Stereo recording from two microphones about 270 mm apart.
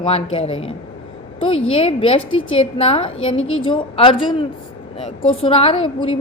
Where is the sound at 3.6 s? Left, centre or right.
Centre.